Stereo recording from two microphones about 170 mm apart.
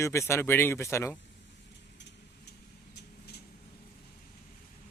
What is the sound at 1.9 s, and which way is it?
Vehicle, 85° left.